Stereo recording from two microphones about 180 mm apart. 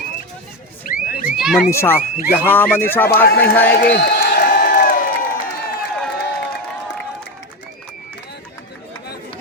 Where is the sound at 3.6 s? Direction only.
55° left (ahead or behind).